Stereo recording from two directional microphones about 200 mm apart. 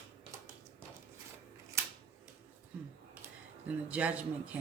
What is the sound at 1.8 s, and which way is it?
Scissors, 15° right (ahead or behind).